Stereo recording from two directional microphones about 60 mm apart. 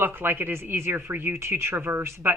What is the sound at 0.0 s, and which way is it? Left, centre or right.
Speech, right.